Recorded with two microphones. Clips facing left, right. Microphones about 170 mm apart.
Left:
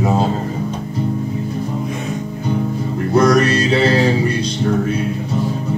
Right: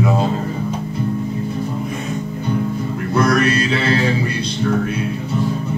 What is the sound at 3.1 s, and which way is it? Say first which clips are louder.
Music: left 3 dB; 40° left (ahead or behind).